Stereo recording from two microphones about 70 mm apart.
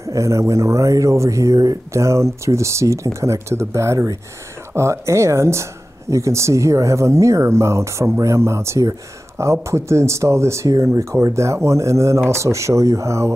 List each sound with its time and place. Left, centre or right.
0.0 s speech: right